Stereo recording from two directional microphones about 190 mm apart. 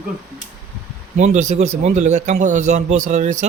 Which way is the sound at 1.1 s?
40° right (ahead or behind).